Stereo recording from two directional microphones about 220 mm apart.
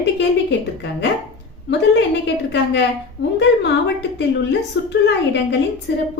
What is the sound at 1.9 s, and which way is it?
Speech, 55° left (ahead or behind).